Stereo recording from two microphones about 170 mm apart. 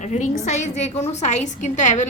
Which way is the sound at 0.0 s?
45° left (ahead or behind).